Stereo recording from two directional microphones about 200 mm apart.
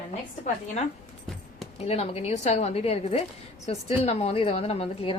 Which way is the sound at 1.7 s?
30° left (ahead or behind).